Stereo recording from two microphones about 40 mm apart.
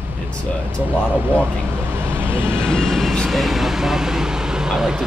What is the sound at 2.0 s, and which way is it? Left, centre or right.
Vehicle, right.